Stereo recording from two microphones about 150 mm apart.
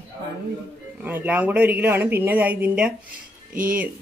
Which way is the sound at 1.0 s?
10° right (ahead or behind).